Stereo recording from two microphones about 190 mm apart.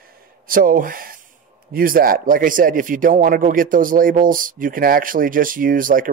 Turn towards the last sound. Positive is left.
turn(degrees=-45)  # may be behind; listen again after turning